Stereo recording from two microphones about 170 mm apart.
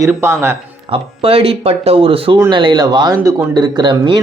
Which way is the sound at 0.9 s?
35° right (ahead or behind).